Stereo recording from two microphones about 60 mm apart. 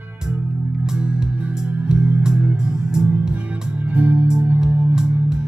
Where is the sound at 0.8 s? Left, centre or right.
Centre.